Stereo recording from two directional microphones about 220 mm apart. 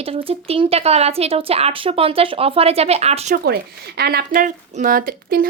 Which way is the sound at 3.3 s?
45° right (ahead or behind).